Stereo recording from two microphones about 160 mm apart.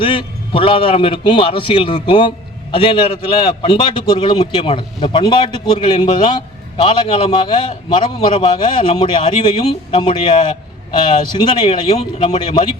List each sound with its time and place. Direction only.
0.0 s a man's voice: 30° left (ahead or behind)